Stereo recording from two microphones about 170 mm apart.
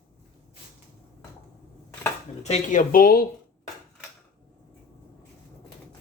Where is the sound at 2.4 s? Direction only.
45° left (ahead or behind).